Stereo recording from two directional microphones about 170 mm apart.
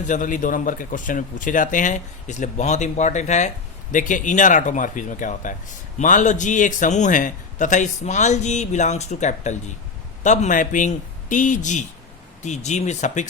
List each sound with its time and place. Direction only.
0.1 s a man's voice: 50° left (ahead or behind)